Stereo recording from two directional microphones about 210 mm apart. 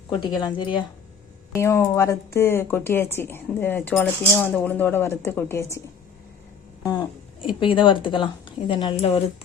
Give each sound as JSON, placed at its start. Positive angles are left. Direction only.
{"t": 0.1, "sound": "a woman's voice", "side_deg": 20}
{"t": 7.4, "sound": "a woman's voice", "side_deg": 25}